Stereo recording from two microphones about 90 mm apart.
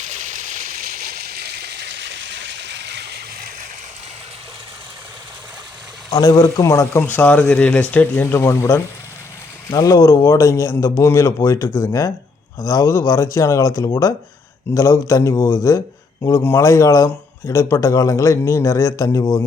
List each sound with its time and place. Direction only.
6.1 s speech: 45° left (ahead or behind)
7.1 s speech: 15° left (ahead or behind)
9.6 s speech: 40° left (ahead or behind)